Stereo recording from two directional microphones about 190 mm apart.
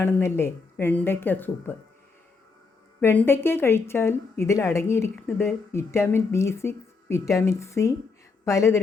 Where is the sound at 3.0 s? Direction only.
10° left (ahead or behind).